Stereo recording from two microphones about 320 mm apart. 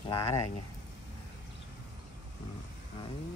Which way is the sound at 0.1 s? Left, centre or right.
Centre.